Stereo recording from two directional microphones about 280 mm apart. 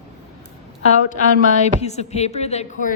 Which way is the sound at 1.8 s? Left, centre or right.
Left.